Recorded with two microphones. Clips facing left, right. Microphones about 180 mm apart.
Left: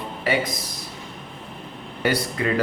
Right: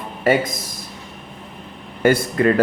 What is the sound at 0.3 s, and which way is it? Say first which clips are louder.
Speech: right 6 dB; 45° right (ahead or behind).